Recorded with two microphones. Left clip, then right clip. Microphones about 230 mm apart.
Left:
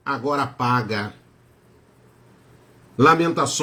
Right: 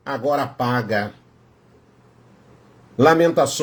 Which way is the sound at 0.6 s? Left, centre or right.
Left.